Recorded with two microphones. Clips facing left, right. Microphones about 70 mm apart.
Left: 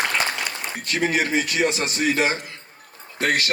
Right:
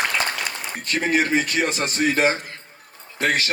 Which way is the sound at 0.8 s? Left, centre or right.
Right.